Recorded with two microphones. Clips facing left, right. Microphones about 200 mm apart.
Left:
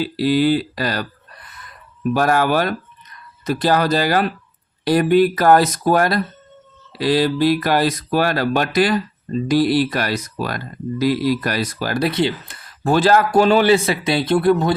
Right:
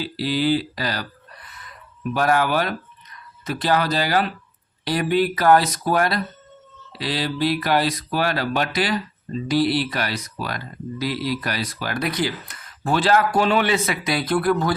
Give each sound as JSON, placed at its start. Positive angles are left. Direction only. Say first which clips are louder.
{"t": 0.0, "sound": "speech", "louder": "left 6 dB", "side_deg": 50}
{"t": 2.1, "sound": "speech", "louder": "left 3 dB", "side_deg": 45}